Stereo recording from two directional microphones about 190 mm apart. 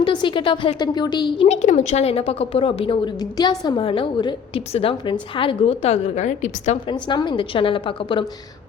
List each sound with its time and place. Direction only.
0.0 s a woman's voice: 25° left (ahead or behind)
1.5 s a woman's voice: 40° left (ahead or behind)
6.8 s a woman's voice: 25° left (ahead or behind)